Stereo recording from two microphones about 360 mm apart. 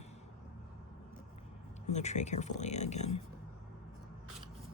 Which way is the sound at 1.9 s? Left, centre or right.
Centre.